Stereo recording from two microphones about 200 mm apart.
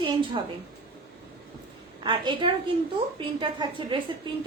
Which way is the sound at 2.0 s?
25° right (ahead or behind).